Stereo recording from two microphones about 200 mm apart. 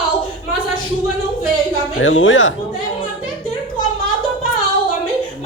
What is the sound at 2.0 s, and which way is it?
Speech, 75° left (ahead or behind).